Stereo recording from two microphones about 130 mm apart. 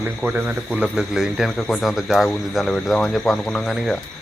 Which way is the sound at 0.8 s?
5° right (ahead or behind).